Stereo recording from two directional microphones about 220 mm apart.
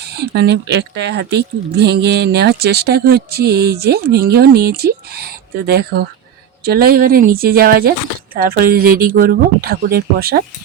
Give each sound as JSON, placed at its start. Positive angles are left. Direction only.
{"t": 0.2, "sound": "speech", "side_deg": -50}